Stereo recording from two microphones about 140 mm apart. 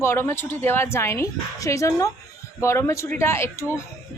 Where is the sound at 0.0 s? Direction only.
20° left (ahead or behind).